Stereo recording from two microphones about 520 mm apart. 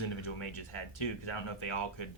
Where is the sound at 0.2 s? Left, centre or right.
Left.